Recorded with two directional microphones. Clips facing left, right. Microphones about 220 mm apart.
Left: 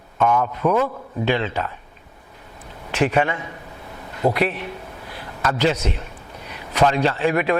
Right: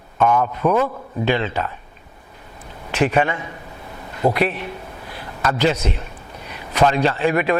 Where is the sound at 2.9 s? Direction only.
15° right (ahead or behind).